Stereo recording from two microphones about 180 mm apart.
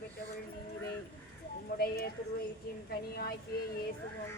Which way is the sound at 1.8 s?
60° left (ahead or behind).